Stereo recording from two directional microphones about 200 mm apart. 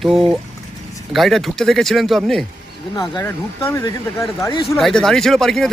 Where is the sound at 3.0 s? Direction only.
15° left (ahead or behind).